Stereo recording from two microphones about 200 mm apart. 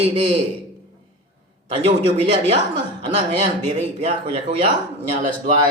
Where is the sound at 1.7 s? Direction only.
35° right (ahead or behind).